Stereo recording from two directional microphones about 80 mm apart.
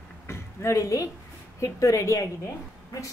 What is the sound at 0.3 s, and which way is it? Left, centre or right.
A woman's voice, left.